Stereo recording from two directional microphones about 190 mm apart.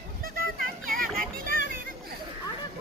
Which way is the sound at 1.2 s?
50° right (ahead or behind).